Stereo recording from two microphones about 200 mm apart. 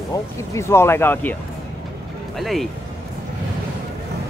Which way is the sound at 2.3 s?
Centre (ahead or behind).